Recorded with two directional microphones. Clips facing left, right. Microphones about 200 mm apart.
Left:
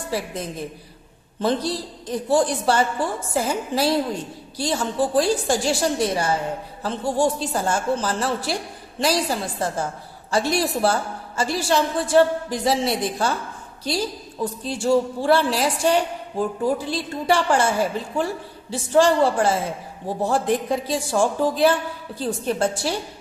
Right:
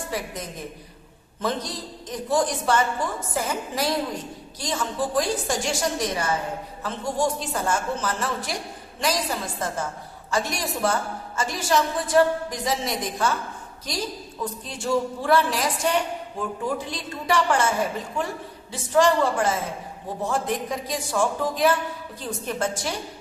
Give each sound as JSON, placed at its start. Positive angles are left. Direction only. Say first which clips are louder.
{"t": 1.4, "sound": "a woman's voice", "louder": "left 5 dB", "side_deg": 30}